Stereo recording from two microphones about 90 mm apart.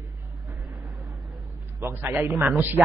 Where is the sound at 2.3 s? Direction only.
Centre (ahead or behind).